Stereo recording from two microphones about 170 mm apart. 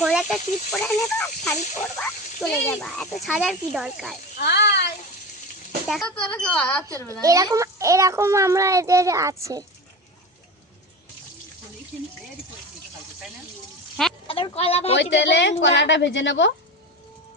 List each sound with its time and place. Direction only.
0.0 s speech: 5° right (ahead or behind)
0.8 s speech: 10° left (ahead or behind)
1.5 s a sound: 45° left (ahead or behind)
1.8 s speech: 5° left (ahead or behind)
4.4 s a child's voice: 75° left (ahead or behind)
5.9 s speech: 5° left (ahead or behind)
7.2 s a child's voice: 20° right (ahead or behind)
14.3 s speech: 35° left (ahead or behind)
15.1 s a woman's voice: 90° left